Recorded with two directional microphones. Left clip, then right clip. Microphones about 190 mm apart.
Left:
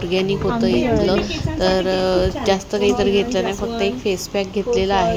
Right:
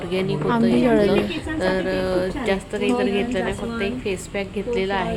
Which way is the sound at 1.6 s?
20° left (ahead or behind).